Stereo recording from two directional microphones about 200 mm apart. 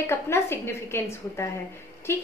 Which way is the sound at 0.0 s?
10° left (ahead or behind).